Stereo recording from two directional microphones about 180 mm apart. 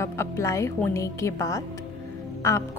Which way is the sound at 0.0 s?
15° left (ahead or behind).